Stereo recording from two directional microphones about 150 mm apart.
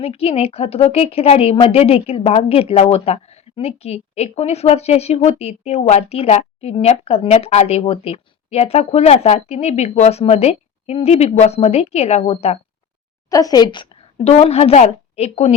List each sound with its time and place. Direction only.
0.0 s a woman's voice: 40° left (ahead or behind)
13.3 s speech: 25° left (ahead or behind)
14.3 s a woman's voice: 45° left (ahead or behind)